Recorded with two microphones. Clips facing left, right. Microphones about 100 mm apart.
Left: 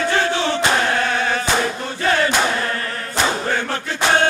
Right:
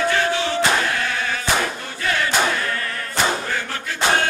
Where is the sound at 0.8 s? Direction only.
35° left (ahead or behind).